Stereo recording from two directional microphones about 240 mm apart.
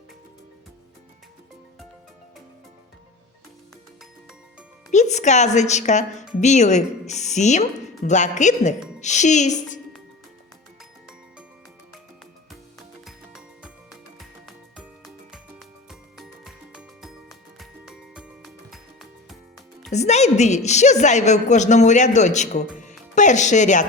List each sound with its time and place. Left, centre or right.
4.9 s a woman's voice: left
13.1 s music: centre
19.9 s a woman's voice: left